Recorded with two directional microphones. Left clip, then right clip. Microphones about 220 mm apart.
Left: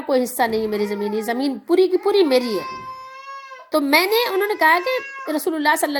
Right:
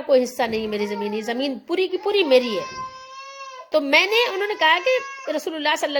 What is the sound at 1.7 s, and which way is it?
Speech, 65° left (ahead or behind).